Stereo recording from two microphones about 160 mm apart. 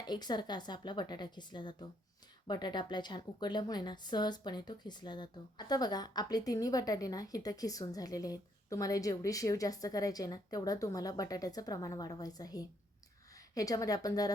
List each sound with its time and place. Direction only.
0.0 s a woman's voice: 25° left (ahead or behind)